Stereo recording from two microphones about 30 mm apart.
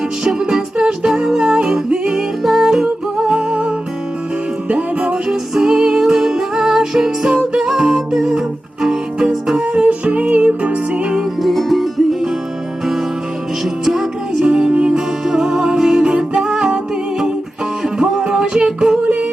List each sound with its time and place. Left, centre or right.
1.0 s music: centre
2.4 s music: centre
2.6 s music: centre
3.2 s music: right
4.7 s music: right
5.1 s music: centre
9.8 s music: right
11.4 s music: centre
13.8 s music: centre
14.3 s music: right
14.9 s music: centre